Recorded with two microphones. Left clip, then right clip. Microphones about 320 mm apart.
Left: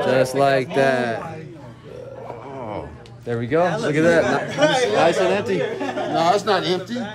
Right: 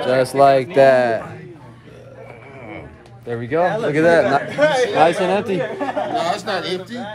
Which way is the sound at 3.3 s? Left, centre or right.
Centre.